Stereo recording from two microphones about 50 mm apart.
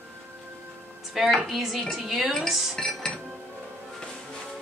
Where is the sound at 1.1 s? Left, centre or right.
Centre.